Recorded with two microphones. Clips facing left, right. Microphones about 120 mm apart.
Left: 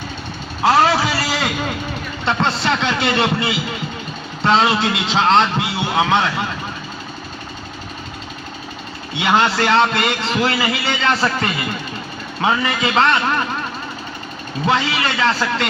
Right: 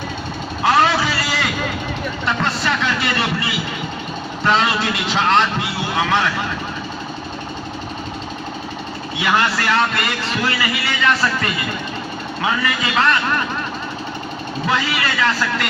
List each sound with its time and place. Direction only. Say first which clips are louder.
0.6 s a sound: left 2 dB; 25° left (ahead or behind)
2.2 s a man's voice: left 3 dB; 25° left (ahead or behind)
9.1 s a man's voice: left 3 dB; 25° left (ahead or behind)
14.7 s a man's voice: left 2 dB; 25° left (ahead or behind)